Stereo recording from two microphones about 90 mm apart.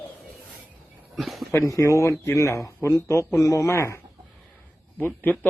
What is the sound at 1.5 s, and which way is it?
Speech, 35° left (ahead or behind).